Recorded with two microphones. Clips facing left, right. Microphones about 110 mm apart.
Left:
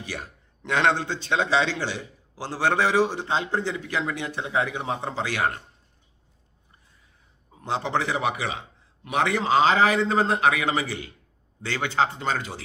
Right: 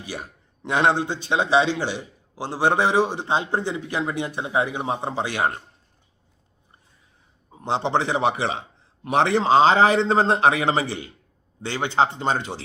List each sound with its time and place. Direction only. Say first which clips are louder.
0.0 s a man's voice: right 1 dB; 15° right (ahead or behind)
7.5 s a man's voice: right 4 dB; 25° right (ahead or behind)